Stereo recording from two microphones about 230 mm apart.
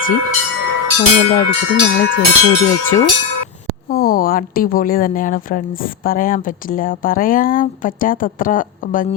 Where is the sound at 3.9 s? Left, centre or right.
Left.